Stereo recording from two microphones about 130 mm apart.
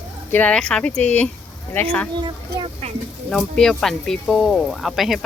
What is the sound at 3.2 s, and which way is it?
Speech, 5° left (ahead or behind).